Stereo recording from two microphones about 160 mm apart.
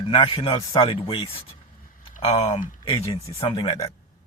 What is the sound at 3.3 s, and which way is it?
Speech, 30° left (ahead or behind).